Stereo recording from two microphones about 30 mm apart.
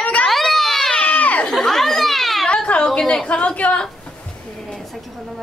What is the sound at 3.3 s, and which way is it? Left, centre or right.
Speech, left.